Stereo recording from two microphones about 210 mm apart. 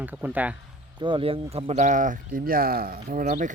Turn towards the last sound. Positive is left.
turn(degrees=-40)  # may be behind; listen again after turning